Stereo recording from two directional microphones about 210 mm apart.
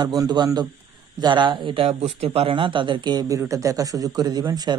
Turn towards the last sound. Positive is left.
turn(degrees=-20)  # may be behind; listen again after turning